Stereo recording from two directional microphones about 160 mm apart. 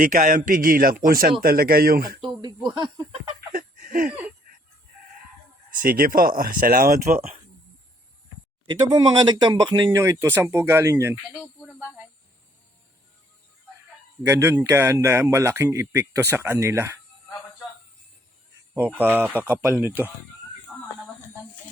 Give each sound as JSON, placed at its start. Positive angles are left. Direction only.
{"t": 0.0, "sound": "speech", "side_deg": -55}
{"t": 2.2, "sound": "speech", "side_deg": -30}
{"t": 2.7, "sound": "a sound", "side_deg": -30}
{"t": 3.5, "sound": "a sound", "side_deg": -55}
{"t": 5.8, "sound": "speech", "side_deg": -60}
{"t": 8.7, "sound": "speech", "side_deg": -25}
{"t": 14.3, "sound": "speech", "side_deg": -15}
{"t": 18.7, "sound": "speech", "side_deg": -10}
{"t": 20.7, "sound": "a sound", "side_deg": -10}